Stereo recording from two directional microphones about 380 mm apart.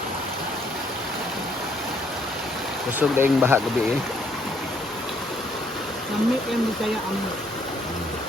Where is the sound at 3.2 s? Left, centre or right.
Centre.